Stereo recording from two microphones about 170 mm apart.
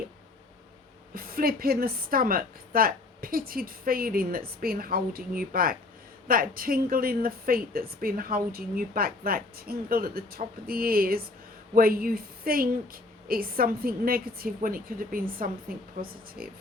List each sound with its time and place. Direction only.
1.1 s speech: 60° right (ahead or behind)